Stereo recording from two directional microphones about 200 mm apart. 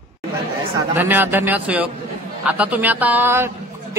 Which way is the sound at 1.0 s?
10° right (ahead or behind).